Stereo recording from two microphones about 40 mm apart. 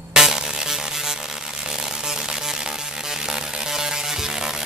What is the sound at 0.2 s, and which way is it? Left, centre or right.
Music, centre.